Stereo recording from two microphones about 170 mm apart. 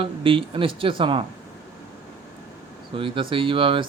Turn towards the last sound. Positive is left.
turn(degrees=-30)  # may be behind; listen again after turning